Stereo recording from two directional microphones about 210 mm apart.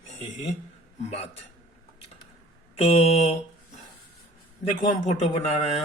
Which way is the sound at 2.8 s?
30° left (ahead or behind).